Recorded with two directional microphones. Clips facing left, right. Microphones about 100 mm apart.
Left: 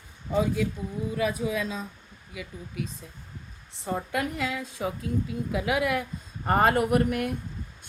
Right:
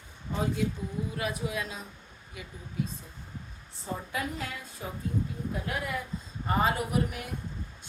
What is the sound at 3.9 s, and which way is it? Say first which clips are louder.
A woman's voice: left 6 dB; 70° left (ahead or behind).